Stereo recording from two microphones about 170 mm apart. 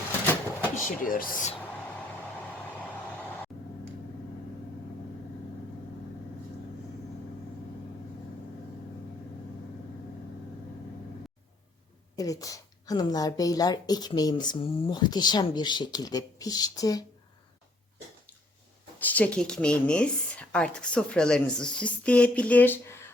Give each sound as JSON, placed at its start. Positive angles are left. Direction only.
{"t": 0.9, "sound": "speech", "side_deg": 55}
{"t": 12.1, "sound": "a woman's voice", "side_deg": 20}
{"t": 18.9, "sound": "a woman's voice", "side_deg": 10}